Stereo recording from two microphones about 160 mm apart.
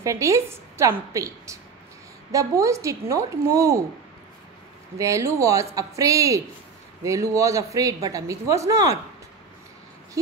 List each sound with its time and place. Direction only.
0.0 s a woman's voice: 20° right (ahead or behind)
4.9 s a woman's voice: 20° right (ahead or behind)